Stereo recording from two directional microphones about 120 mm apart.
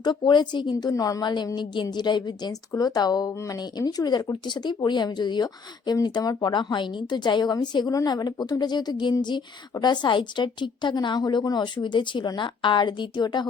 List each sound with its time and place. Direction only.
0.0 s a woman's voice: 40° left (ahead or behind)